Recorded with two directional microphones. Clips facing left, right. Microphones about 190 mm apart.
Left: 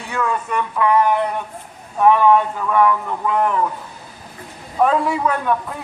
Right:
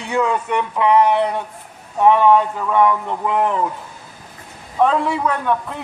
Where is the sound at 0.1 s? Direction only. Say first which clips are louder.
Right 3 dB; 20° right (ahead or behind).